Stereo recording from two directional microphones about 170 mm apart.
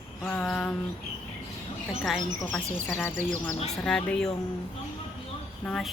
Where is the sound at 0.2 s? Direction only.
5° left (ahead or behind).